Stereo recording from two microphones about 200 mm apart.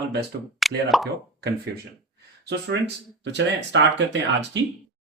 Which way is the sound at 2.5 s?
60° right (ahead or behind).